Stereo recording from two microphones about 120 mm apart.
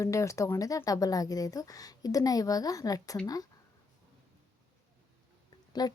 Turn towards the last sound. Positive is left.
turn(degrees=35)  # may be behind; listen again after turning